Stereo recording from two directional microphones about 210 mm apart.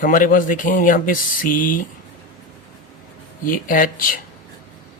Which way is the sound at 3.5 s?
40° left (ahead or behind).